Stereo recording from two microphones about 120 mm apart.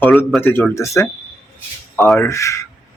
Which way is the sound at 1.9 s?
Centre (ahead or behind).